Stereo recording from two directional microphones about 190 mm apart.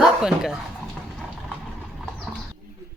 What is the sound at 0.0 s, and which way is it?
Dog, 5° right (ahead or behind).